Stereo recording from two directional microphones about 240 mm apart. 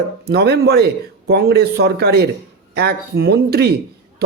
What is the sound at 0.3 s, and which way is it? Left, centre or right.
A man's voice, right.